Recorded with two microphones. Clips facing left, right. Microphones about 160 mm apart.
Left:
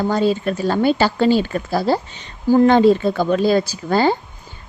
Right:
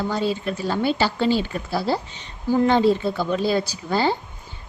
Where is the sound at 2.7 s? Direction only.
60° left (ahead or behind).